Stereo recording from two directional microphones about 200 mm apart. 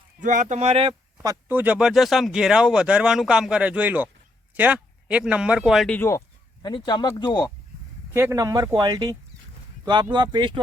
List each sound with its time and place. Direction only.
0.2 s speech: 40° right (ahead or behind); by 7.5 s 20° left (ahead or behind)
8.1 s speech: 15° right (ahead or behind)